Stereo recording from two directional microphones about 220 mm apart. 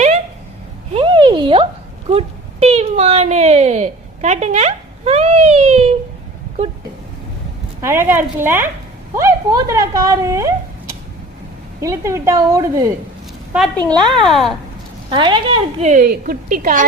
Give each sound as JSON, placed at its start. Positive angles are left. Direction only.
{"t": 0.9, "sound": "a sound", "side_deg": -20}
{"t": 2.0, "sound": "speech", "side_deg": -30}
{"t": 7.8, "sound": "speech", "side_deg": -10}
{"t": 11.8, "sound": "speech", "side_deg": -15}
{"t": 13.5, "sound": "a woman's voice", "side_deg": 0}
{"t": 15.1, "sound": "a woman's voice", "side_deg": -20}